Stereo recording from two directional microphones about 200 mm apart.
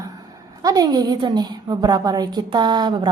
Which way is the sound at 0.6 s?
20° right (ahead or behind).